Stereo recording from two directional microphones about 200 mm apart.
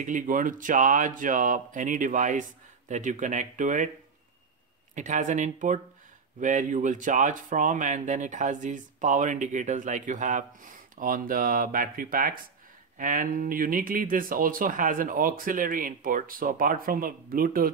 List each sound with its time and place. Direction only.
0.0 s speech: 40° right (ahead or behind)
4.9 s speech: 40° right (ahead or behind)